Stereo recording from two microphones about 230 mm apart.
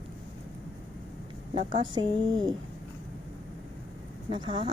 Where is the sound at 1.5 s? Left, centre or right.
Right.